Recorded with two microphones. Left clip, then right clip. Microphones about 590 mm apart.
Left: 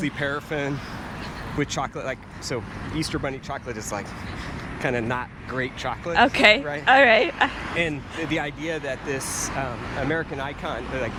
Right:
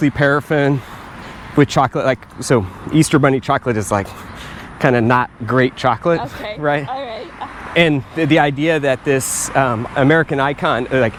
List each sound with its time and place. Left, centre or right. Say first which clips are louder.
0.0 s speech: right 12 dB; right
2.5 s speech: right 14 dB; right
4.8 s speech: right 12 dB; right
6.8 s speech: left 10 dB; left
7.8 s speech: right 13 dB; right